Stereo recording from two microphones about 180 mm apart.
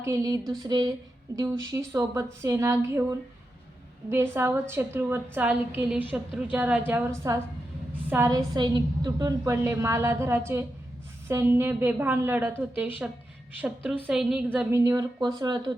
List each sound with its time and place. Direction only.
0.0 s a woman's voice: 20° right (ahead or behind)
14.7 s speech: 20° right (ahead or behind)